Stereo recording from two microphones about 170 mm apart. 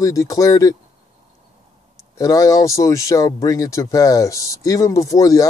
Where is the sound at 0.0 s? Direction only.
20° left (ahead or behind).